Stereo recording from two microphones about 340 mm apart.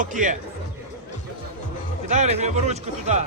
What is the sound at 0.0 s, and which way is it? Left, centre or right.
Speech, right.